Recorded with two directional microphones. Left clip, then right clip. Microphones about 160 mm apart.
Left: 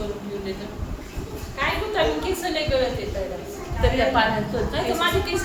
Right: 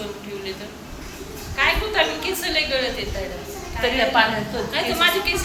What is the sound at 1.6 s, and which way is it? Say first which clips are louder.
Speech: right 5 dB; 25° left (ahead or behind).